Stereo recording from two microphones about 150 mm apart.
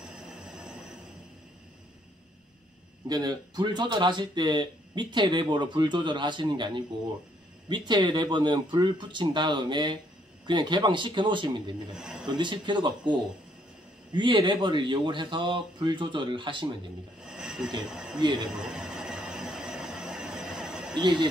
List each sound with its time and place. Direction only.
3.1 s speech: 25° right (ahead or behind)
11.9 s a man's voice: 5° right (ahead or behind)
12.3 s speech: 30° right (ahead or behind)
17.3 s a sound: 5° right (ahead or behind)
17.8 s speech: 5° right (ahead or behind)
18.2 s speech: 30° right (ahead or behind)
18.6 s train: 5° right (ahead or behind)
20.9 s speech: 30° right (ahead or behind)